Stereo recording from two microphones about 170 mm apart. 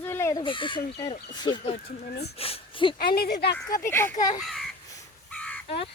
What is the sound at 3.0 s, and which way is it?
Speech, 65° left (ahead or behind).